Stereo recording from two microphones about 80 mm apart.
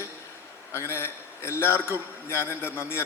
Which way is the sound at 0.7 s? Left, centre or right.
Left.